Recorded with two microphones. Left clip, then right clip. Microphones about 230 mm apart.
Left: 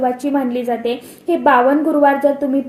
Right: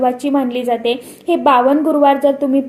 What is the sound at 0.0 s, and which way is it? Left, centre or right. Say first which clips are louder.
A woman's voice: right 2 dB; right.